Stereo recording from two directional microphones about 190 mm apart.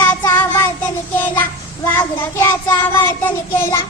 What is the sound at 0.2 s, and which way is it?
Child singing, 15° left (ahead or behind).